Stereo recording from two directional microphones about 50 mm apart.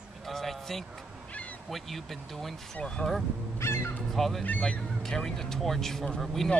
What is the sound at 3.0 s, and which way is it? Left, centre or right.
Speech, left.